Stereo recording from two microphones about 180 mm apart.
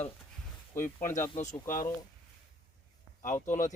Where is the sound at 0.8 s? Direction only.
45° left (ahead or behind).